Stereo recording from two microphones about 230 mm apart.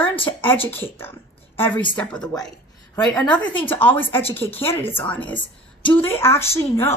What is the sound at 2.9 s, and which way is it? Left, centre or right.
Speech, centre.